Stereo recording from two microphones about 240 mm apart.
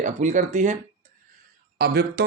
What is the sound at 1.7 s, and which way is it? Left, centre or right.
Speech, right.